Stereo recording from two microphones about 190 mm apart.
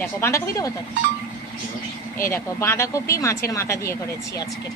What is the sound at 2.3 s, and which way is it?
Speech, 15° left (ahead or behind).